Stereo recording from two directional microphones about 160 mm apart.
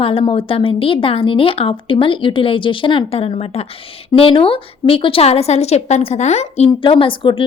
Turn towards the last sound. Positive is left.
turn(degrees=30)  # may be behind; listen again after turning